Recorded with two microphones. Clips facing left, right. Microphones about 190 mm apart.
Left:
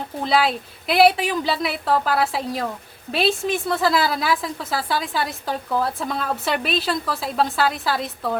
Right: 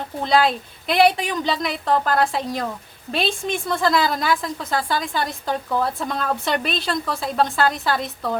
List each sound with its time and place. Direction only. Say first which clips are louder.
0.2 s a woman's voice: right 2 dB; 5° left (ahead or behind)